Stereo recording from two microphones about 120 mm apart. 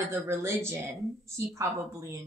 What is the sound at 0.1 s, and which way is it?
Speech, 20° right (ahead or behind).